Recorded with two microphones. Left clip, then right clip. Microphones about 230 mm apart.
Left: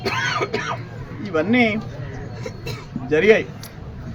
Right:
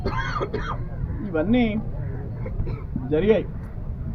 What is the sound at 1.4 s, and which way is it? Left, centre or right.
Speech, left.